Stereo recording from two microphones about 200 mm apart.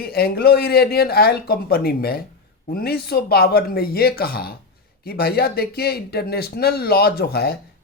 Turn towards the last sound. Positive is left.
turn(degrees=50)  # may be behind; listen again after turning